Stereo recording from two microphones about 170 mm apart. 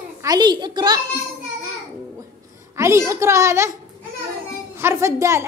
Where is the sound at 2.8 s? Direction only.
15° right (ahead or behind).